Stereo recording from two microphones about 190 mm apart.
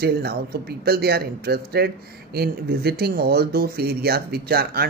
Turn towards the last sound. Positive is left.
turn(degrees=-55)  # may be behind; listen again after turning